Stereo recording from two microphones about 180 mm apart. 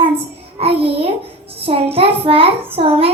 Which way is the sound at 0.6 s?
30° right (ahead or behind).